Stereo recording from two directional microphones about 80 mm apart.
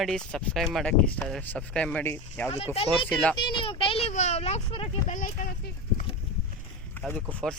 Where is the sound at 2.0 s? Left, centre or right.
Left.